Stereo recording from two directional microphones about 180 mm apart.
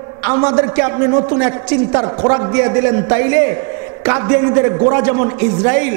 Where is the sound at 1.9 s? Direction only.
35° right (ahead or behind).